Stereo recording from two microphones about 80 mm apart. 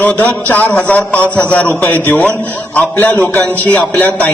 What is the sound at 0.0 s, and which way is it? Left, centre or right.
A man's voice, left.